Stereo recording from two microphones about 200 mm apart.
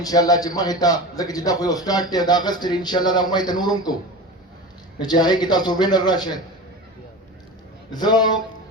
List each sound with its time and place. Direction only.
0.0 s a man's voice: 20° left (ahead or behind)
4.9 s a man's voice: 20° left (ahead or behind)
7.9 s a man's voice: 20° left (ahead or behind)